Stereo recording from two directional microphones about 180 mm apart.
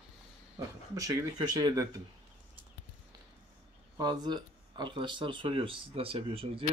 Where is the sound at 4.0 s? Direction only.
25° right (ahead or behind).